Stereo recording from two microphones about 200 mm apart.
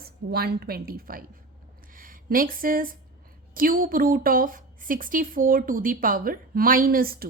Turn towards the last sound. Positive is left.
turn(degrees=-45)  # may be behind; listen again after turning